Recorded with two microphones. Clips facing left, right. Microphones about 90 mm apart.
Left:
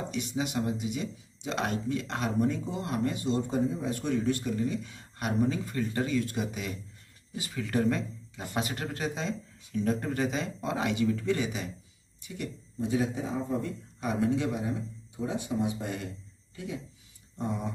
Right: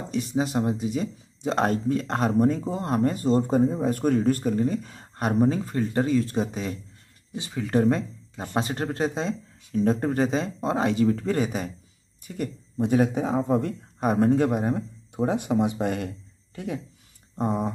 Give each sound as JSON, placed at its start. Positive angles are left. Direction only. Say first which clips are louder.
{"t": 0.1, "sound": "speech", "louder": "right 10 dB", "side_deg": -35}
{"t": 12.7, "sound": "speech", "louder": "right 7 dB", "side_deg": -60}
{"t": 17.4, "sound": "a sound", "louder": "right 7 dB", "side_deg": -45}